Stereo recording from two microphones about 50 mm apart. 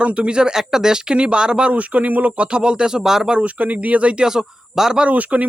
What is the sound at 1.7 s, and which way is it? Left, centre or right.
Speech, right.